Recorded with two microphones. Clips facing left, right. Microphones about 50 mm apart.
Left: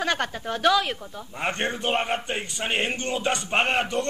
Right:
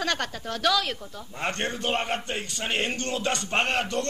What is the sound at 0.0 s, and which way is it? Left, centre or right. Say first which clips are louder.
Speech: left 3 dB; centre.